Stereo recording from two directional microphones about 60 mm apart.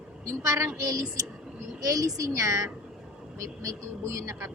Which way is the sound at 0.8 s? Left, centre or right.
Right.